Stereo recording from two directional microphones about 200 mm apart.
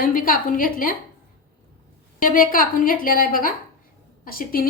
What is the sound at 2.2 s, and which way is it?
A woman's voice, 45° left (ahead or behind).